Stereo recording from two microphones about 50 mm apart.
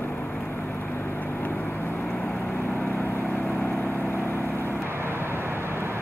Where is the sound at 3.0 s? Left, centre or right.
Left.